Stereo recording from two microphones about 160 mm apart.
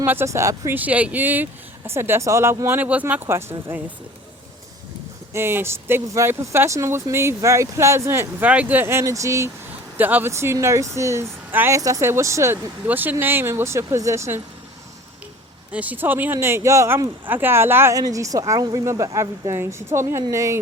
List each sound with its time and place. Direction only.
0.0 s speech: 15° right (ahead or behind)
5.3 s speech: 15° right (ahead or behind)
15.7 s speech: 10° right (ahead or behind)